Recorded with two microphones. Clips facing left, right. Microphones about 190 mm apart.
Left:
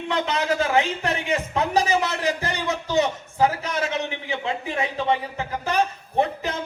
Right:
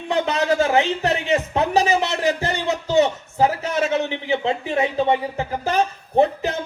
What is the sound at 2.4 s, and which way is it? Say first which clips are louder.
Music: right 3 dB; 25° right (ahead or behind).